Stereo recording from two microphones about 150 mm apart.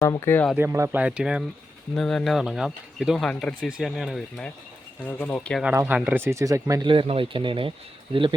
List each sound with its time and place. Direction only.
0.0 s speech: 15° left (ahead or behind)
0.5 s speech: 15° right (ahead or behind); by 5.6 s 5° left (ahead or behind)
5.8 s speech: 10° right (ahead or behind)
6.8 s speech: 35° right (ahead or behind)